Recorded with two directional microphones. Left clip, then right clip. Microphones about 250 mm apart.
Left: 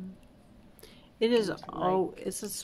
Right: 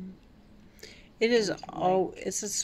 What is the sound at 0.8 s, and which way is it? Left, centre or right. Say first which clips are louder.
Speech: right 1 dB; centre.